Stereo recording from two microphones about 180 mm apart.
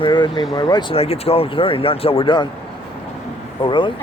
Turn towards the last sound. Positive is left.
turn(degrees=25)  # may be behind; listen again after turning